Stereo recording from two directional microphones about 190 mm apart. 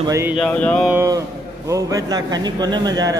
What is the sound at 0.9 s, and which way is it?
A man's voice, 15° right (ahead or behind).